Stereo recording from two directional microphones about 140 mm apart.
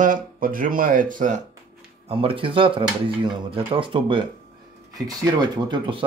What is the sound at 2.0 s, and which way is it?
Speech, 40° right (ahead or behind).